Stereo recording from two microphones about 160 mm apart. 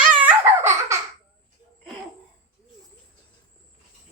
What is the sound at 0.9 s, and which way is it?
Babbling, 20° right (ahead or behind).